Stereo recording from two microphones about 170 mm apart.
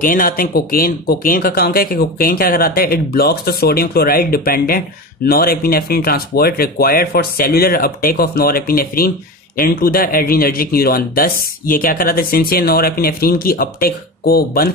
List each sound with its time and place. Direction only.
0.0 s speech: 55° left (ahead or behind)